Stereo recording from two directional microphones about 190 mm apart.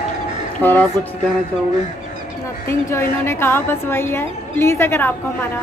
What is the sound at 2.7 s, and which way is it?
A woman's voice, 15° left (ahead or behind).